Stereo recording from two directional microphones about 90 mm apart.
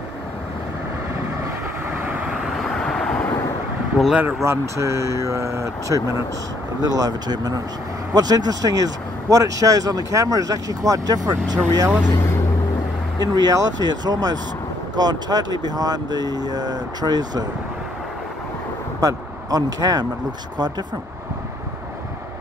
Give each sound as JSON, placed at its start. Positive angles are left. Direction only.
{"t": 1.9, "sound": "vehicle", "side_deg": -20}
{"t": 2.5, "sound": "vehicle", "side_deg": 5}
{"t": 4.0, "sound": "speech", "side_deg": 0}
{"t": 4.5, "sound": "speech", "side_deg": -35}
{"t": 13.2, "sound": "speech", "side_deg": -50}
{"t": 18.9, "sound": "speech", "side_deg": -40}